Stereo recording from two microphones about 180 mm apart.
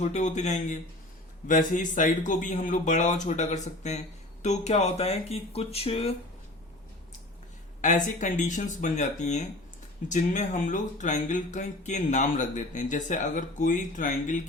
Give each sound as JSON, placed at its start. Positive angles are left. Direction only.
{"t": 0.0, "sound": "speech", "side_deg": 40}
{"t": 7.8, "sound": "speech", "side_deg": 45}